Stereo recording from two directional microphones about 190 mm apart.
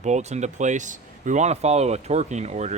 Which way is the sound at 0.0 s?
35° right (ahead or behind).